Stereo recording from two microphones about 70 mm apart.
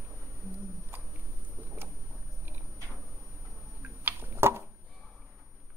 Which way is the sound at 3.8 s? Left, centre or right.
Right.